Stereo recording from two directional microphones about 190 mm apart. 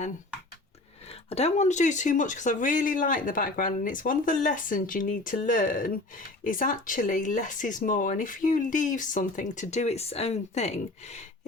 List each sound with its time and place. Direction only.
1.3 s speech: 35° left (ahead or behind)